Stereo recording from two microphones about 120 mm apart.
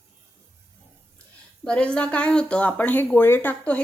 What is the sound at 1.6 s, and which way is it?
Speech, 10° left (ahead or behind).